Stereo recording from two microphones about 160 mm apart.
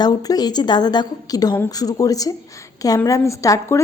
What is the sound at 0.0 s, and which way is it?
A woman's voice, 25° left (ahead or behind).